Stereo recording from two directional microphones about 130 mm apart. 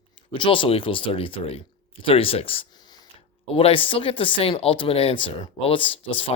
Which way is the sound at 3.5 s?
45° left (ahead or behind).